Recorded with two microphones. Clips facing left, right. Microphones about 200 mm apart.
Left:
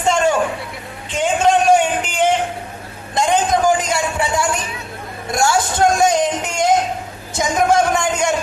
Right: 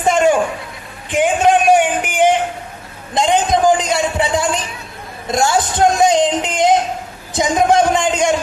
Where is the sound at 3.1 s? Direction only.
20° right (ahead or behind).